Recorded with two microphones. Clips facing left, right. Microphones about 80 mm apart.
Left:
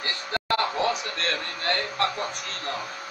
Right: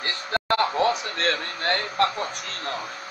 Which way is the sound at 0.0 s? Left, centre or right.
Right.